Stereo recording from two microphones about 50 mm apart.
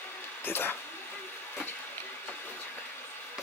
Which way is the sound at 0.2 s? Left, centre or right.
Left.